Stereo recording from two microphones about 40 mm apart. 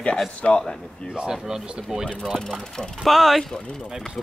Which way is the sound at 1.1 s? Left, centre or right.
Centre.